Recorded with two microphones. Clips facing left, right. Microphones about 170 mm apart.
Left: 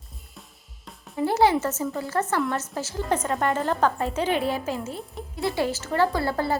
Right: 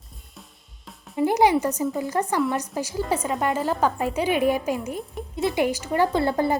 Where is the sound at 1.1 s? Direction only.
15° right (ahead or behind).